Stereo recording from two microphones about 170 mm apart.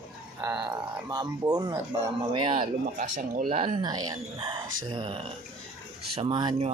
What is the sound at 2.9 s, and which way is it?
Speech, 45° right (ahead or behind).